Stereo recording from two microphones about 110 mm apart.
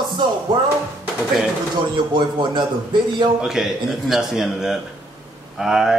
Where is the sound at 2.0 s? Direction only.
45° right (ahead or behind).